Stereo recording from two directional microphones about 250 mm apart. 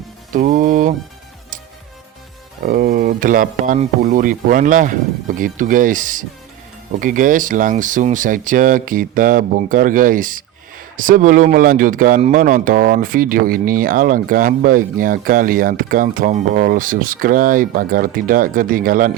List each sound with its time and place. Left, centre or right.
0.3 s music: right
2.6 s speech: right